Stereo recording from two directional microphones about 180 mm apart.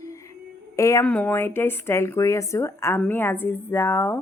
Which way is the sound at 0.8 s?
15° left (ahead or behind).